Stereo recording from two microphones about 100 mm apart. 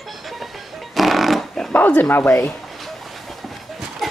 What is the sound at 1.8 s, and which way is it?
Dog, 15° left (ahead or behind).